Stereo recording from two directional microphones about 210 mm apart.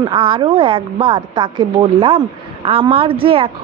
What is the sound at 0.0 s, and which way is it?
A woman's voice, 25° right (ahead or behind).